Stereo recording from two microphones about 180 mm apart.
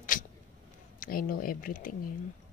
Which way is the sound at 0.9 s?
50° left (ahead or behind).